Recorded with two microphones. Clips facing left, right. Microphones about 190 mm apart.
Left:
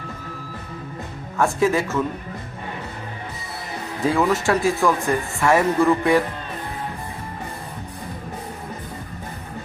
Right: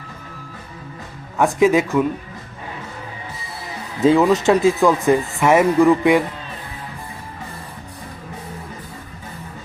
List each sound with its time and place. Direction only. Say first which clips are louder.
1.4 s speech: right 4 dB; 15° right (ahead or behind)
4.0 s speech: right 6 dB; 20° right (ahead or behind)